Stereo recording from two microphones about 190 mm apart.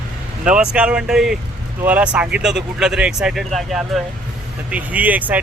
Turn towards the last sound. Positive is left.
turn(degrees=-10)  # may be behind; listen again after turning